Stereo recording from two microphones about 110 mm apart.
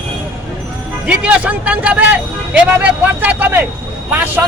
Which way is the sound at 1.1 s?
10° right (ahead or behind).